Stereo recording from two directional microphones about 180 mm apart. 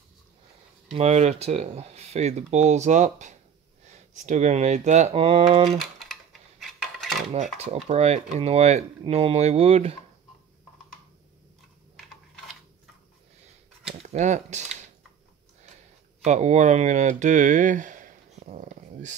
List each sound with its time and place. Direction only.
0.9 s speech: 35° right (ahead or behind)
5.8 s typing: centre (ahead or behind)
6.6 s dishes: centre (ahead or behind)
7.5 s speech: 35° right (ahead or behind)
14.0 s speech: 40° right (ahead or behind)
16.3 s speech: 40° right (ahead or behind)